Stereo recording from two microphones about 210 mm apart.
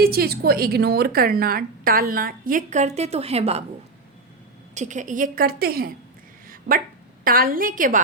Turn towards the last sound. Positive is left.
turn(degrees=-40)  # may be behind; listen again after turning